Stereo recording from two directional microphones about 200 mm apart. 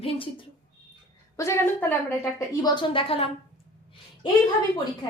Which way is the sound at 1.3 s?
15° left (ahead or behind).